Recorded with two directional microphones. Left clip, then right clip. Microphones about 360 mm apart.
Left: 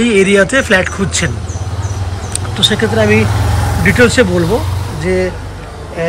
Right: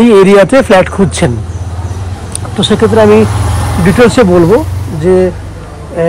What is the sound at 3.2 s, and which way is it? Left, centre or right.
Vehicle, right.